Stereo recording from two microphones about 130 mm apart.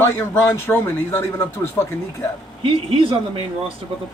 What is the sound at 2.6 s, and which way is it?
Speech, 40° right (ahead or behind).